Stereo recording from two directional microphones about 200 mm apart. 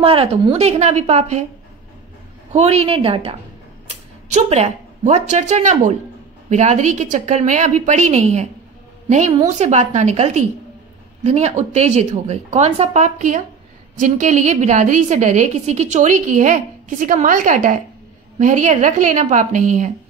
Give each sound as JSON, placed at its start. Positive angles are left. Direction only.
{"t": 0.0, "sound": "a woman's voice", "side_deg": -30}
{"t": 2.5, "sound": "a woman's voice", "side_deg": -30}
{"t": 9.5, "sound": "a woman's voice", "side_deg": -35}